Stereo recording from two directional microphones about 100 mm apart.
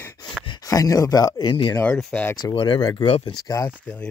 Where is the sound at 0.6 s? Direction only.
35° left (ahead or behind).